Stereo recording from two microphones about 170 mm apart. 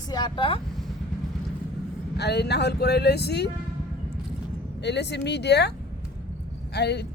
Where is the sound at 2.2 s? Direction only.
75° left (ahead or behind).